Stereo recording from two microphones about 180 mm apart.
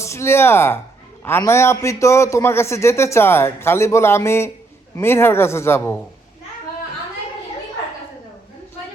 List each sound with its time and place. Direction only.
0.0 s a man's voice: 15° left (ahead or behind)